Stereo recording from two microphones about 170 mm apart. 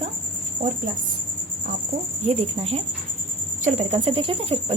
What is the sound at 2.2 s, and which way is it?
Speech, 35° right (ahead or behind).